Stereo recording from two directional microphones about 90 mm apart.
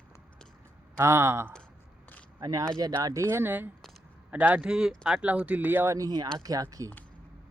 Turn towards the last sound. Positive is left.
turn(degrees=-45)  # may be behind; listen again after turning